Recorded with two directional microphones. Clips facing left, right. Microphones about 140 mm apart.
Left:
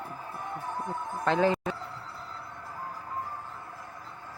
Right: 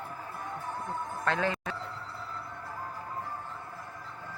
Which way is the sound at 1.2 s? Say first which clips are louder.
Left 6 dB; 30° left (ahead or behind).